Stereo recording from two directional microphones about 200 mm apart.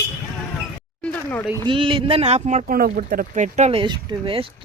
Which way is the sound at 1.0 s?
10° left (ahead or behind).